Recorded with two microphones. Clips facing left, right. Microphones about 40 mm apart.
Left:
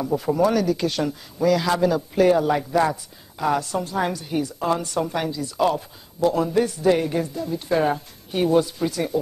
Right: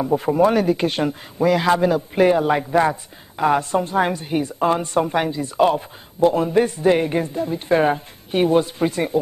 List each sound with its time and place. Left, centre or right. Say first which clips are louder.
0.0 s a woman's voice: right 4 dB; right